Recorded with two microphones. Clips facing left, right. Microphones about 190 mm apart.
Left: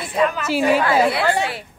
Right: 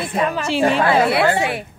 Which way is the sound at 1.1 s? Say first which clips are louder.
Right 3 dB; 25° right (ahead or behind).